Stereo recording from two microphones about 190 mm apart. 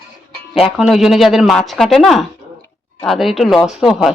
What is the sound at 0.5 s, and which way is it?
Speech, 5° right (ahead or behind).